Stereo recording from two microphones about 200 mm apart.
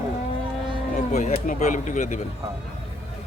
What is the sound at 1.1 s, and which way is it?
Speech, 35° left (ahead or behind).